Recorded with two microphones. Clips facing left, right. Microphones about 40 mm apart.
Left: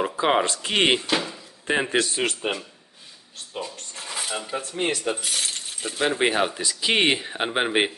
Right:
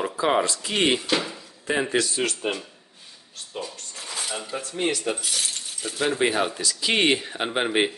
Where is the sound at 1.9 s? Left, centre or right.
Left.